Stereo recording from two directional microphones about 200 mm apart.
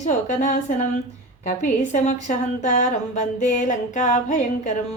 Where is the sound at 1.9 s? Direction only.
40° left (ahead or behind).